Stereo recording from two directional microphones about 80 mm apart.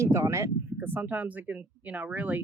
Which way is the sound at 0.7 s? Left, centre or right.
Right.